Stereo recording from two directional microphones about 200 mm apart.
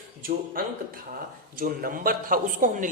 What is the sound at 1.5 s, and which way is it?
A woman's voice, 45° right (ahead or behind).